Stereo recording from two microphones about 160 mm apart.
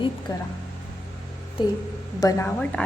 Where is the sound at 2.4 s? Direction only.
5° left (ahead or behind).